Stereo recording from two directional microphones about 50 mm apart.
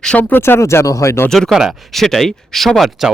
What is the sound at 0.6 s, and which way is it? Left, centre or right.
Speech, left.